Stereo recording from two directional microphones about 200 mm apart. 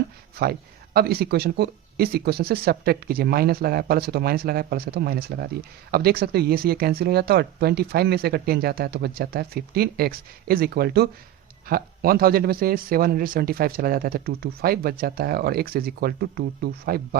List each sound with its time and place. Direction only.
0.4 s speech: 50° right (ahead or behind)